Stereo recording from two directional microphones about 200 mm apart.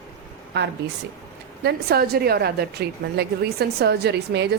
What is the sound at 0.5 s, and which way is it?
A woman's voice, 60° right (ahead or behind).